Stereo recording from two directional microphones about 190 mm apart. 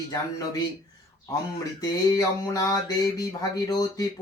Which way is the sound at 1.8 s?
20° left (ahead or behind).